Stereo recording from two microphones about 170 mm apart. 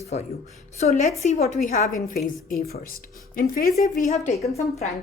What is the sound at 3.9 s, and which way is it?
Speech, 45° left (ahead or behind).